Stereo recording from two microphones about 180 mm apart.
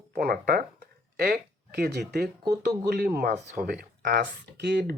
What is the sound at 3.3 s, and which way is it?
Speech, 45° right (ahead or behind).